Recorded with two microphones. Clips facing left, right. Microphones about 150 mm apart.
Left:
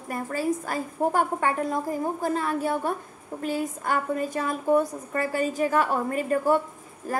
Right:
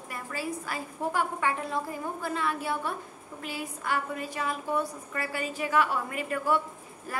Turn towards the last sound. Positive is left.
turn(degrees=40)  # may be behind; listen again after turning